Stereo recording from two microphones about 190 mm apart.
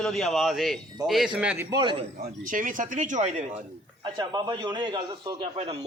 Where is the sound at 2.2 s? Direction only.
45° right (ahead or behind).